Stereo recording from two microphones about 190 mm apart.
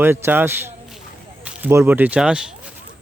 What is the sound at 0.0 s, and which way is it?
Speech, 10° right (ahead or behind).